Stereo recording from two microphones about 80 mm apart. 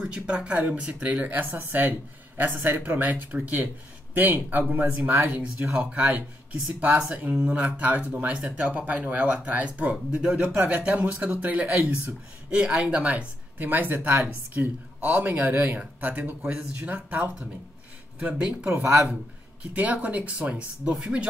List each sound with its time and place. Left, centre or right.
0.0 s speech: centre